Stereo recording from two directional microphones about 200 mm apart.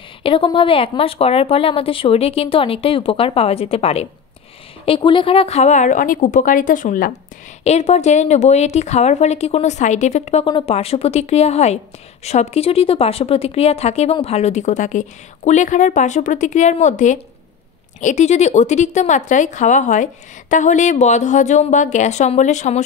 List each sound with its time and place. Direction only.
0.2 s a woman's voice: 25° left (ahead or behind)